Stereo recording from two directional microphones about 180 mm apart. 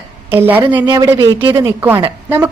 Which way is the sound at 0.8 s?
25° right (ahead or behind).